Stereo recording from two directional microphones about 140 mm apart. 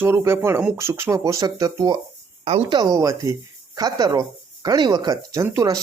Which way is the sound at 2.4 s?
45° right (ahead or behind).